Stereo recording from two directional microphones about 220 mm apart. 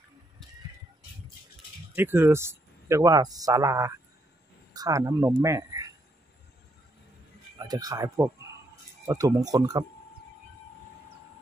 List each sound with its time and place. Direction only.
2.0 s speech: 10° right (ahead or behind)
7.5 s speech: 20° right (ahead or behind)